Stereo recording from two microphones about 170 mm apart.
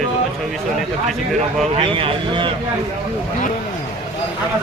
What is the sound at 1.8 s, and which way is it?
Speech, 30° right (ahead or behind).